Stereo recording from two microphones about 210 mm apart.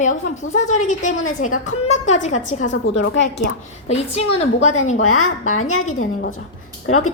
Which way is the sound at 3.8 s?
30° left (ahead or behind).